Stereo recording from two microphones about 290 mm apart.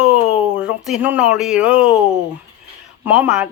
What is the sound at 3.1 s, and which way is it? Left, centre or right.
Speech, centre.